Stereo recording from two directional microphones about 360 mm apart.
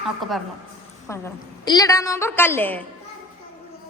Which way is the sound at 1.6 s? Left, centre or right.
Centre.